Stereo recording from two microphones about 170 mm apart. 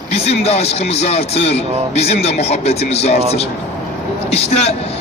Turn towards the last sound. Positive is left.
turn(degrees=40)  # may be behind; listen again after turning